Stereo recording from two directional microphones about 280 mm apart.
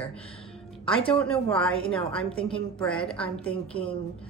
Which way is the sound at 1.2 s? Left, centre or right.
Centre.